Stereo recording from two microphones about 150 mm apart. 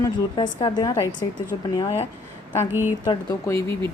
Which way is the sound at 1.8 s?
40° left (ahead or behind).